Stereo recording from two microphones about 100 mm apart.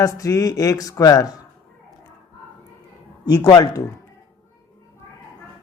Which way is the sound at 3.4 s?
45° left (ahead or behind).